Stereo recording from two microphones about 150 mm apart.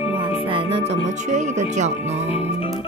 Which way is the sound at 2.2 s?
40° left (ahead or behind).